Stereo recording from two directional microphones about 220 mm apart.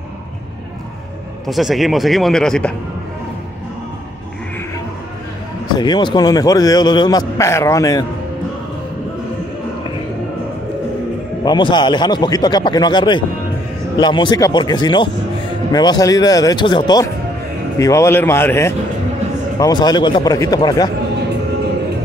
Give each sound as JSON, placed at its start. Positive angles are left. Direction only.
{"t": 1.5, "sound": "speech", "side_deg": 0}
{"t": 5.8, "sound": "a man's voice", "side_deg": 20}
{"t": 11.4, "sound": "a man's voice", "side_deg": 20}